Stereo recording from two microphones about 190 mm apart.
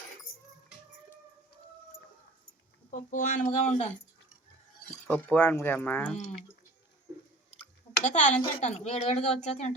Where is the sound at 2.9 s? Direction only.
40° left (ahead or behind).